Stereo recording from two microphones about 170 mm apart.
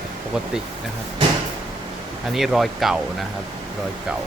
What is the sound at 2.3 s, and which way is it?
Speech, centre (ahead or behind).